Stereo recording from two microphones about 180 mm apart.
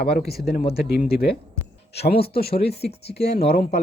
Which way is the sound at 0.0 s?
60° left (ahead or behind).